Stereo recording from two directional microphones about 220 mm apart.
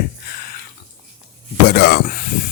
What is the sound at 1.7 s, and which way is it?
Speech, 45° left (ahead or behind).